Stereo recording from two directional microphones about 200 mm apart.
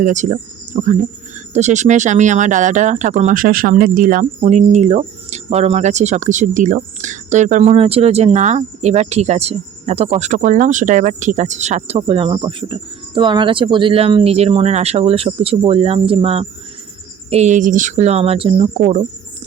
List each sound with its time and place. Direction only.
0.0 s speech: 40° right (ahead or behind)